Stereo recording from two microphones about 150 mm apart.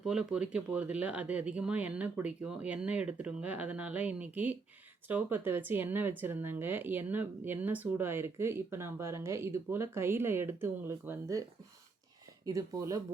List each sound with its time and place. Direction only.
0.0 s speech: 5° right (ahead or behind)
12.5 s speech: 25° right (ahead or behind)